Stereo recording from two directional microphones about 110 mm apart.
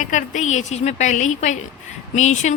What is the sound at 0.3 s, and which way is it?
Speech, 90° left.